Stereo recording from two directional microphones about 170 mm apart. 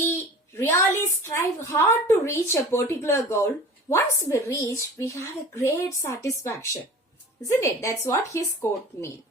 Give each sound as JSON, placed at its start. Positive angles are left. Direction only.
{"t": 0.5, "sound": "a woman's voice", "side_deg": 15}